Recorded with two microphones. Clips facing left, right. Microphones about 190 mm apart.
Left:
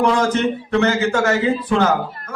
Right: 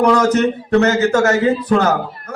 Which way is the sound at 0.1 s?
40° right (ahead or behind).